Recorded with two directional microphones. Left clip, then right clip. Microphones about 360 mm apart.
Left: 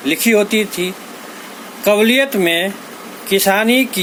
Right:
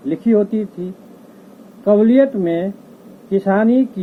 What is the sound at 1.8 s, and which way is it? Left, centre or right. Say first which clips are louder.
Speech: even; left.